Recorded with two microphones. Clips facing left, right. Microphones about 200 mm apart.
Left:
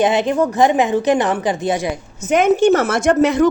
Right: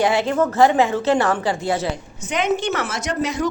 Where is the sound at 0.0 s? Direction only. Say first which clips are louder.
Left 3 dB; 20° left (ahead or behind).